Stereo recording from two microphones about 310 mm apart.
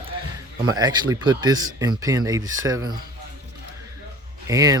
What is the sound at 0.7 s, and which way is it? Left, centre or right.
Speech, centre.